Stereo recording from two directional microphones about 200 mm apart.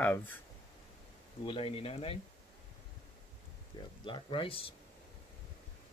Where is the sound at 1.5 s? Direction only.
30° left (ahead or behind).